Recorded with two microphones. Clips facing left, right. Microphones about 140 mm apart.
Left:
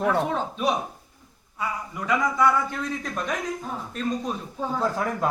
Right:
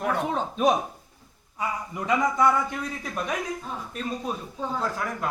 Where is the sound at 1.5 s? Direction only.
25° right (ahead or behind).